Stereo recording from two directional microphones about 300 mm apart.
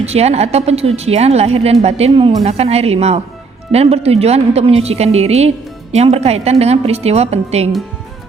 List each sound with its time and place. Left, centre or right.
0.0 s a woman's voice: right